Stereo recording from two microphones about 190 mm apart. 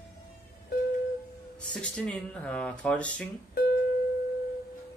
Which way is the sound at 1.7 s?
5° left (ahead or behind).